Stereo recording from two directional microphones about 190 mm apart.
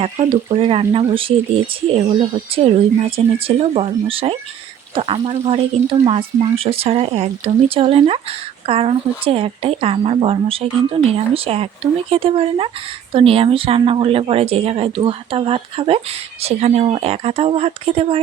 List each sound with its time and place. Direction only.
0.0 s speech: 35° right (ahead or behind)